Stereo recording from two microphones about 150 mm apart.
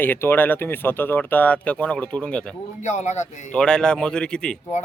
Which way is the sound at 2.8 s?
50° left (ahead or behind).